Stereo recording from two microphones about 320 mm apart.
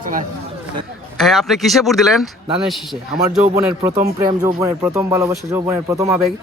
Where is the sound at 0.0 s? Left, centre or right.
Right.